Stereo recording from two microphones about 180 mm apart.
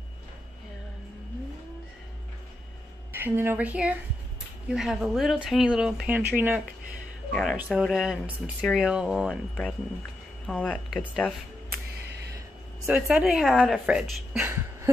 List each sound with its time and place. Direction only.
3.1 s speech: 10° right (ahead or behind)
12.8 s speech: 5° right (ahead or behind)